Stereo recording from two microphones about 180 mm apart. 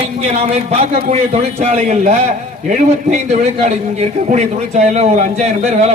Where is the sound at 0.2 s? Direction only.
40° right (ahead or behind).